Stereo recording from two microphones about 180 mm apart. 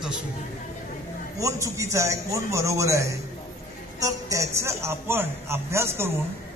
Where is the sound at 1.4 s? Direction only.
15° right (ahead or behind).